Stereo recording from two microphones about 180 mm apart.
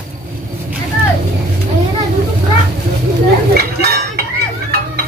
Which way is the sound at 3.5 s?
60° right (ahead or behind).